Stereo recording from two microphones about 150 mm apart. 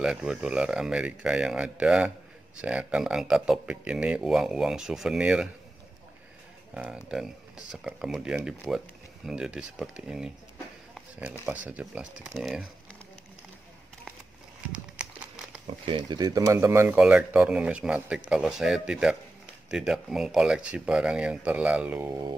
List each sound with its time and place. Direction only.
0.0 s speech: 5° right (ahead or behind)
6.7 s speech: 5° right (ahead or behind)
14.7 s horse: 5° right (ahead or behind)
15.6 s speech: 35° right (ahead or behind)
16.1 s speech: 25° right (ahead or behind)